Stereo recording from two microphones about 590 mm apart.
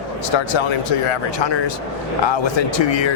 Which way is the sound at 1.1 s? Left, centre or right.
Left.